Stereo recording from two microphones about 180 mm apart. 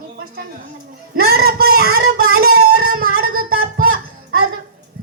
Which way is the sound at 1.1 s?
60° right (ahead or behind).